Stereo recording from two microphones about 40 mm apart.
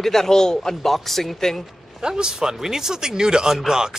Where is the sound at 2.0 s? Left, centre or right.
Centre.